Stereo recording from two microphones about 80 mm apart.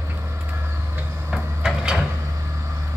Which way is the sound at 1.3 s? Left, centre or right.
Centre.